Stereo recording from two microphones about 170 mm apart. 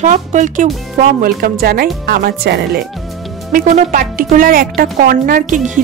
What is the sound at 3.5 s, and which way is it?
Speech, 55° right (ahead or behind).